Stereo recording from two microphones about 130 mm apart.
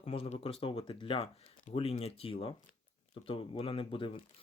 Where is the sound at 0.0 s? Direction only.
50° left (ahead or behind).